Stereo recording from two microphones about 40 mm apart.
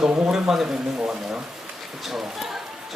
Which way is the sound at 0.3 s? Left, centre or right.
Centre.